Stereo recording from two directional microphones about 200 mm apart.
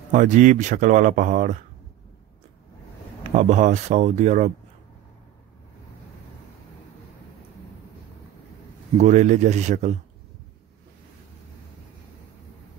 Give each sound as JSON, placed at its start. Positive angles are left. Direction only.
{"t": 0.1, "sound": "speech", "side_deg": -40}
{"t": 3.3, "sound": "speech", "side_deg": -40}
{"t": 9.0, "sound": "speech", "side_deg": -35}